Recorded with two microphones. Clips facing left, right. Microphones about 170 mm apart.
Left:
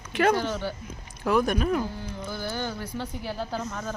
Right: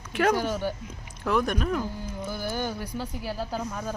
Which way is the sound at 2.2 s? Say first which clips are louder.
Right 1 dB; 10° right (ahead or behind).